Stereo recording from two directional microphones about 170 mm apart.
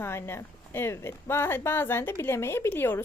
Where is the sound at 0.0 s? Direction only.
15° left (ahead or behind).